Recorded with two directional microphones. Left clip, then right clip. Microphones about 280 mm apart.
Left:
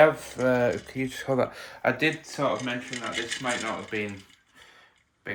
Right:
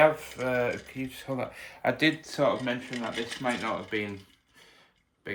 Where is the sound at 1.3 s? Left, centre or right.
Left.